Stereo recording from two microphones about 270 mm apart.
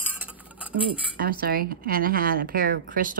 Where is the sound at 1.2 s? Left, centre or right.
Right.